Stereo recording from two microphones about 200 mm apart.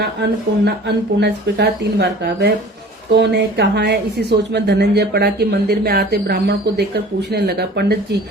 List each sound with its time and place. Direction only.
0.0 s a woman's voice: 55° right (ahead or behind)